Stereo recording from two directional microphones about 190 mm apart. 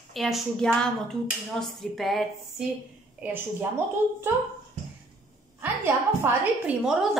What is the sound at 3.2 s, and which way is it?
Speech, 10° right (ahead or behind).